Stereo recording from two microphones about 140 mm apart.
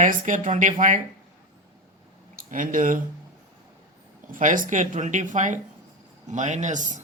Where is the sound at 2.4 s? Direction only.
75° right (ahead or behind).